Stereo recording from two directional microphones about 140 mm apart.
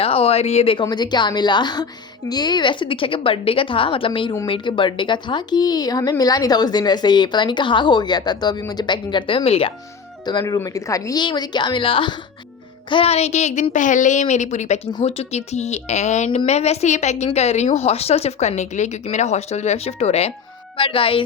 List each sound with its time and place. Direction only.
0.0 s speech: 45° left (ahead or behind)
0.9 s a woman's voice: 30° left (ahead or behind)
10.4 s a woman's voice: 20° left (ahead or behind); by 21.2 s 40° left (ahead or behind)